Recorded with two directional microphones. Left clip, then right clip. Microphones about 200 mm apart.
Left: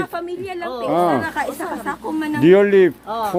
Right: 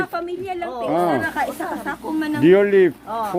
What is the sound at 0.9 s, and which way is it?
A woman's voice, 15° left (ahead or behind).